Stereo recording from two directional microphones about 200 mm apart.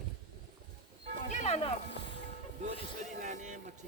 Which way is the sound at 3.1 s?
35° right (ahead or behind).